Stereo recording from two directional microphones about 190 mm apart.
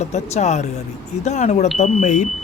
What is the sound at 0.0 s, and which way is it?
Speech, 35° left (ahead or behind).